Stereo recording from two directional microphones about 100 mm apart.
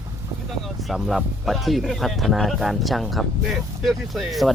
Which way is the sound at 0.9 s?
Centre (ahead or behind).